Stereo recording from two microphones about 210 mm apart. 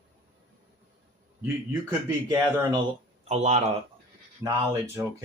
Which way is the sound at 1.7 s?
10° right (ahead or behind).